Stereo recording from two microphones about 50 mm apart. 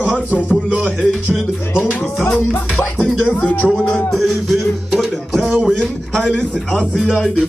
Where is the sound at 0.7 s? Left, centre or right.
Right.